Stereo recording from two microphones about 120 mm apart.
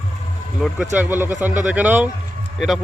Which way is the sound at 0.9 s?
15° right (ahead or behind).